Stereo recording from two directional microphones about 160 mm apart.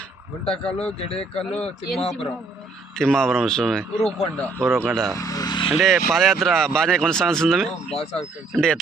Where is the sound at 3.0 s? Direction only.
5° left (ahead or behind).